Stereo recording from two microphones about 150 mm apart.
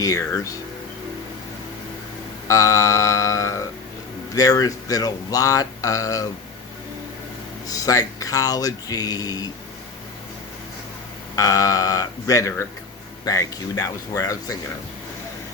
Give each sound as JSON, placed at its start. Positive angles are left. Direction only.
{"t": 0.0, "sound": "speech", "side_deg": 20}
{"t": 2.5, "sound": "mantra", "side_deg": 20}
{"t": 4.4, "sound": "speech", "side_deg": 25}
{"t": 7.7, "sound": "speech", "side_deg": 25}
{"t": 11.3, "sound": "speech", "side_deg": 25}